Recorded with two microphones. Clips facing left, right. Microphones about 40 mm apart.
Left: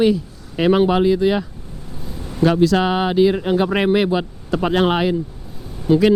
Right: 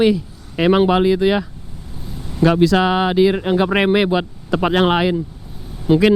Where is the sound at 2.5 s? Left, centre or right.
Right.